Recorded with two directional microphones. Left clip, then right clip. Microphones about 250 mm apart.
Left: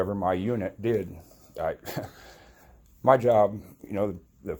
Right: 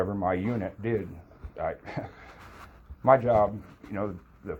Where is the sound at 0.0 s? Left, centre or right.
Left.